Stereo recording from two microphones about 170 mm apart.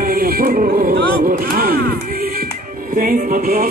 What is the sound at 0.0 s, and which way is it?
Music, 60° right (ahead or behind).